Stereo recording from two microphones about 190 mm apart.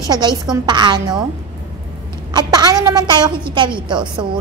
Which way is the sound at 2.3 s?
20° right (ahead or behind).